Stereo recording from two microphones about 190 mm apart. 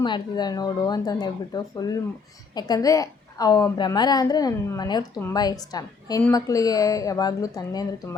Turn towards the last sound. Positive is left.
turn(degrees=20)  # may be behind; listen again after turning